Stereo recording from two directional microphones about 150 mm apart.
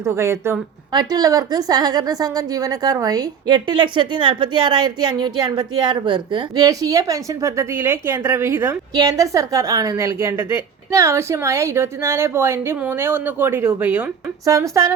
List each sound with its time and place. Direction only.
0.0 s a woman's voice: 20° right (ahead or behind)
14.4 s a woman's voice: 20° right (ahead or behind)